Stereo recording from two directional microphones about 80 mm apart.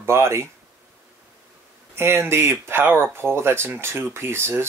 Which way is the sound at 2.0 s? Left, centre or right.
Right.